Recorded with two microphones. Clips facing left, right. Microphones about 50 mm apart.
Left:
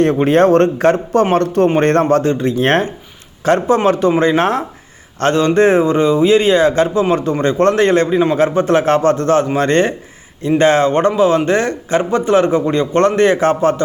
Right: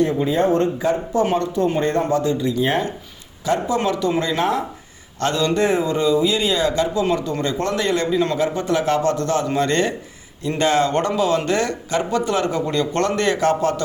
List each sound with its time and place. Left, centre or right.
0.0 s speech: left
3.4 s speech: left